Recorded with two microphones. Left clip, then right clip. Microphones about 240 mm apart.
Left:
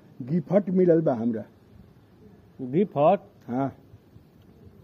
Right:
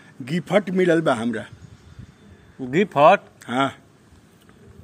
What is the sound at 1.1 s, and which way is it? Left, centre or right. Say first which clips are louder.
Speech: right 4 dB; right.